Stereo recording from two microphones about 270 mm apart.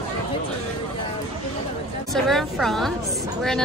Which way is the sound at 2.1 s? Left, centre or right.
Centre.